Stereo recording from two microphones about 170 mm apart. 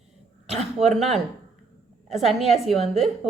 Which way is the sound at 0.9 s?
Centre (ahead or behind).